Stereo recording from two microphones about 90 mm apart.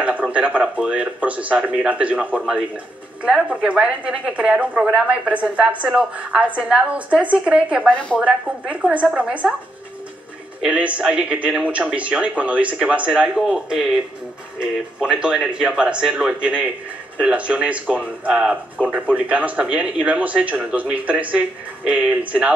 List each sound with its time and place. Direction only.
0.0 s speech: 15° right (ahead or behind)
7.9 s a woman's voice: 10° left (ahead or behind)
8.2 s speech: 15° right (ahead or behind)
10.6 s speech: 15° right (ahead or behind)